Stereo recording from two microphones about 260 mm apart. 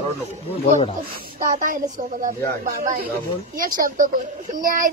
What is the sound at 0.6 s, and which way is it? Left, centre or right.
Speech, left.